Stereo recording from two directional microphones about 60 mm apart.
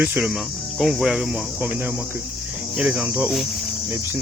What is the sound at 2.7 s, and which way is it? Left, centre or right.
Cricket, centre.